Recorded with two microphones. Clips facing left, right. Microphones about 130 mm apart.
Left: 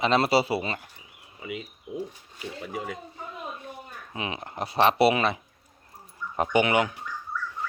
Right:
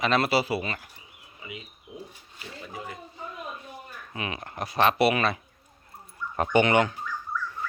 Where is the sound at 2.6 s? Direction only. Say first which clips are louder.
Left 4 dB; 75° left (ahead or behind).